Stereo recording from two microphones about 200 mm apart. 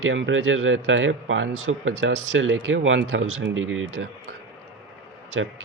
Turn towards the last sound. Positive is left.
turn(degrees=-80)